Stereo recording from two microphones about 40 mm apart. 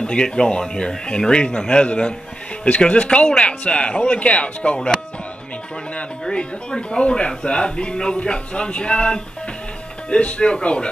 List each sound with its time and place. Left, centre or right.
0.0 s speech: left
4.7 s speech: centre
6.2 s speech: centre